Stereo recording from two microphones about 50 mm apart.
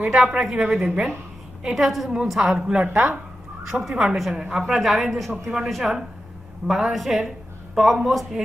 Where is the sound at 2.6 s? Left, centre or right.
Centre.